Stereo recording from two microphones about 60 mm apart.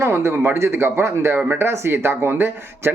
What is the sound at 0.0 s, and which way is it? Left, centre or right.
Speech, right.